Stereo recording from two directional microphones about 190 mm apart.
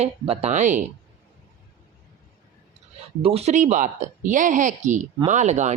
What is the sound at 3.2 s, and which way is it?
Speech, 35° right (ahead or behind).